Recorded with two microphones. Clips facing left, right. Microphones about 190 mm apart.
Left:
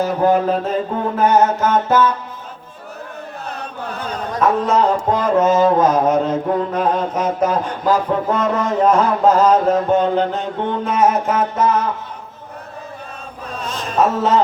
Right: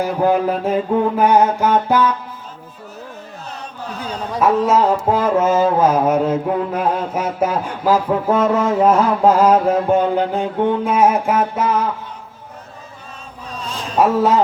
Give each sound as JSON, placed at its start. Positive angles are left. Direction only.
{"t": 0.0, "sound": "music", "side_deg": -10}
{"t": 3.6, "sound": "chant", "side_deg": 55}
{"t": 4.3, "sound": "music", "side_deg": -10}
{"t": 14.0, "sound": "music", "side_deg": -10}